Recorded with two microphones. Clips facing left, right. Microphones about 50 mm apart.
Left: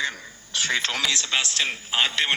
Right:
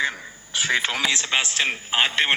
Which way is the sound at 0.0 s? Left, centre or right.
Centre.